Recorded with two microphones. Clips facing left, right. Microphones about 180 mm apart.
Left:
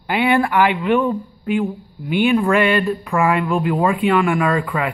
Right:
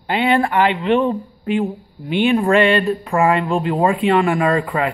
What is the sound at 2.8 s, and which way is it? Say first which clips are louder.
Speech: right 2 dB; 35° right (ahead or behind).